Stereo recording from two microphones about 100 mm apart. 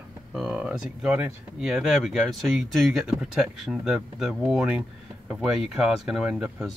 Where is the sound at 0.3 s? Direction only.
5° right (ahead or behind).